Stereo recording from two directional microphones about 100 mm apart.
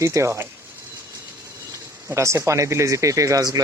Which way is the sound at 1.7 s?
30° right (ahead or behind).